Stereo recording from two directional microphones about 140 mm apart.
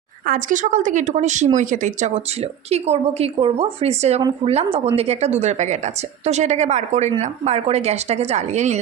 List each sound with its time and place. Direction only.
0.3 s a woman's voice: 70° right (ahead or behind); by 8.8 s 55° right (ahead or behind)